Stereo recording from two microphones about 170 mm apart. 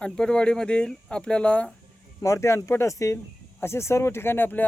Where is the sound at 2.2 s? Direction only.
15° left (ahead or behind).